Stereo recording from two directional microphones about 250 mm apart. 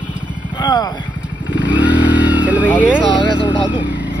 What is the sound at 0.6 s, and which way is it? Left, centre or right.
Speech, centre.